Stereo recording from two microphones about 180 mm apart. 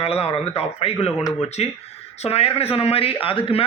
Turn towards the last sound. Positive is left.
turn(degrees=30)  # may be behind; listen again after turning